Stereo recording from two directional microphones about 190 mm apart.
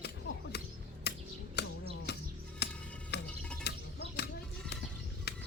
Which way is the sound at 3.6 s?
60° left (ahead or behind).